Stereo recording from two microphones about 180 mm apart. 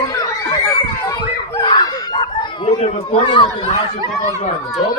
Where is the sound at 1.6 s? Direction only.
25° left (ahead or behind).